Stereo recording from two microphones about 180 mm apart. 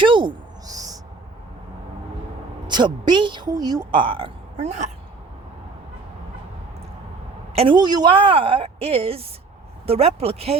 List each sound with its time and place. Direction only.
0.0 s a sound: 25° right (ahead or behind)
2.6 s a woman's voice: 25° right (ahead or behind); by 4.9 s 40° right (ahead or behind)
7.5 s a woman's voice: 30° right (ahead or behind)